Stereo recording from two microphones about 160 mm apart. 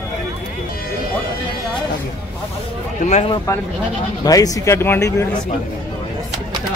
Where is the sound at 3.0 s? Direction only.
45° left (ahead or behind).